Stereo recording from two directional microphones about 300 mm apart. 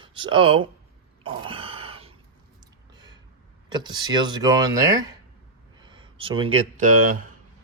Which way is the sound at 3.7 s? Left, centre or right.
Centre.